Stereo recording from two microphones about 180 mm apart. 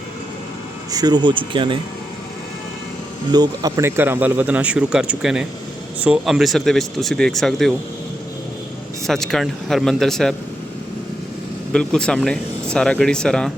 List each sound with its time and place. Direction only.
0.9 s speech: 20° right (ahead or behind)
3.3 s speech: 20° right (ahead or behind); by 7.7 s centre (ahead or behind)
9.0 s speech: centre (ahead or behind)
11.7 s speech: 5° left (ahead or behind)